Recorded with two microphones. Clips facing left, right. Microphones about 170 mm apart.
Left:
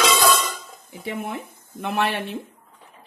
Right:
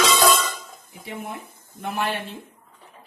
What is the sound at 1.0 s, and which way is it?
Speech, 75° left (ahead or behind).